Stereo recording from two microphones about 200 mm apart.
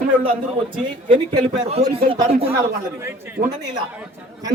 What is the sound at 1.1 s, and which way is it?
Speech, 20° right (ahead or behind).